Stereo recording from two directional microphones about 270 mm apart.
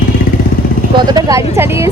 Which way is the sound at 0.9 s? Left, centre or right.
Centre.